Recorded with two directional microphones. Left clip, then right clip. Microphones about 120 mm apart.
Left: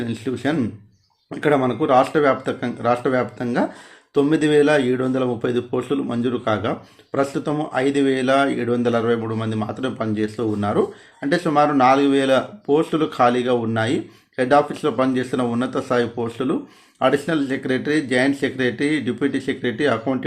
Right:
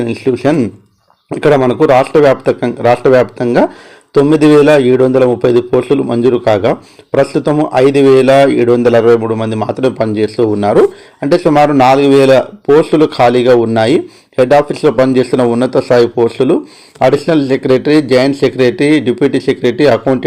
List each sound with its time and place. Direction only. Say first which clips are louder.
0.0 s a man's voice: right 12 dB; 50° right (ahead or behind)